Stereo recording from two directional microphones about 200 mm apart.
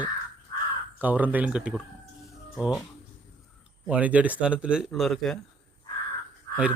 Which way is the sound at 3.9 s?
5° right (ahead or behind).